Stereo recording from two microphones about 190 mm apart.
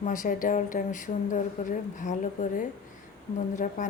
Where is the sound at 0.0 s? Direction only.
45° left (ahead or behind).